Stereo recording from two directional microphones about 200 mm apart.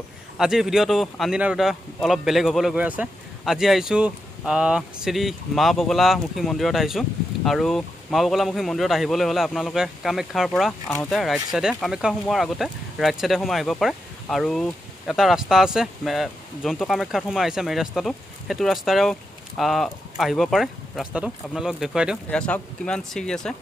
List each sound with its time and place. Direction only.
0.4 s speech: centre (ahead or behind)